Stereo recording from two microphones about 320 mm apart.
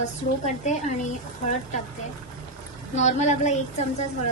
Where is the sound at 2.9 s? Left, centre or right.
Left.